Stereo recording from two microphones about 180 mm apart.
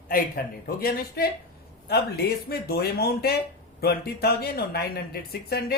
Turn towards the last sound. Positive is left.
turn(degrees=60)  # may be behind; listen again after turning